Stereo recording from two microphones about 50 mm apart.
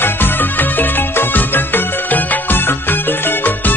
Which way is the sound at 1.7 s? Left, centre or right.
Left.